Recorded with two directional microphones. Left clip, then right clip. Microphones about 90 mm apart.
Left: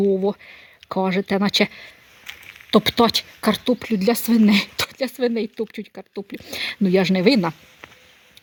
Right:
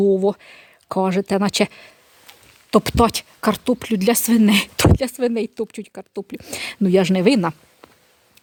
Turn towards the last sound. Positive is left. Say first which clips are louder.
# right 1 dB
turn(degrees=-25)  # may be behind; listen again after turning